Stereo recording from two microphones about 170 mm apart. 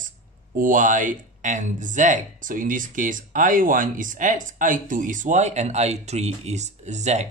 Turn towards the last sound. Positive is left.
turn(degrees=-40)  # may be behind; listen again after turning